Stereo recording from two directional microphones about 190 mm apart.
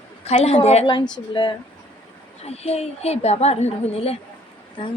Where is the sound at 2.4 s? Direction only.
35° left (ahead or behind).